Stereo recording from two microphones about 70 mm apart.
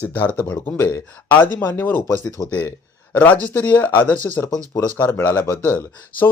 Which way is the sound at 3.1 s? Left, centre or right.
Left.